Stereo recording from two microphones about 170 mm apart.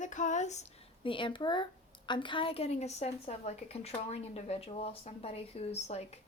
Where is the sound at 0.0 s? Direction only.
45° left (ahead or behind).